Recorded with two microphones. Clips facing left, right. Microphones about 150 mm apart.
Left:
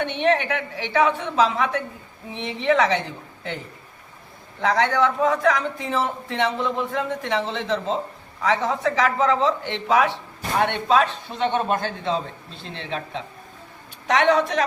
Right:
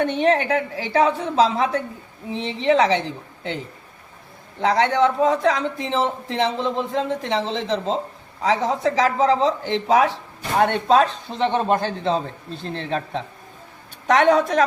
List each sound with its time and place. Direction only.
0.0 s a man's voice: 40° right (ahead or behind)
4.6 s a man's voice: 25° right (ahead or behind); by 14.6 s 45° right (ahead or behind)